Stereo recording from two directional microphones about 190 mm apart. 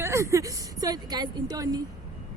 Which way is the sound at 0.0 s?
15° right (ahead or behind).